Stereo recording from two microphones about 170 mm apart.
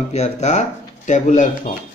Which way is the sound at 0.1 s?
40° left (ahead or behind).